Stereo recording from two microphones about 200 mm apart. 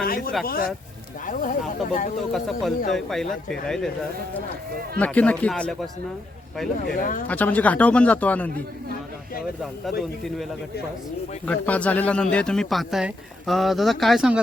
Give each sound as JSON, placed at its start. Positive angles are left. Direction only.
{"t": 0.0, "sound": "speech", "side_deg": 45}
{"t": 2.3, "sound": "speech", "side_deg": 0}
{"t": 4.9, "sound": "speech", "side_deg": 5}
{"t": 6.7, "sound": "speech", "side_deg": 45}
{"t": 7.3, "sound": "speech", "side_deg": 10}
{"t": 11.4, "sound": "speech", "side_deg": 5}